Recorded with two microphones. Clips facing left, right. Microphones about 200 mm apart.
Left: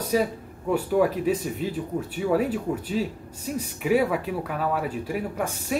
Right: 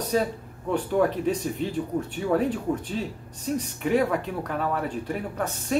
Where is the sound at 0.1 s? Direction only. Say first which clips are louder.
Left 2 dB; 5° left (ahead or behind).